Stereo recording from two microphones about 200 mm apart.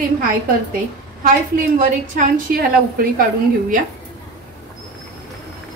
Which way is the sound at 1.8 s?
40° right (ahead or behind).